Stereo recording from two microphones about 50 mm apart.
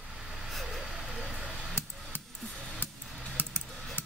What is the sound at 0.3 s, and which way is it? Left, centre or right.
Vehicle, centre.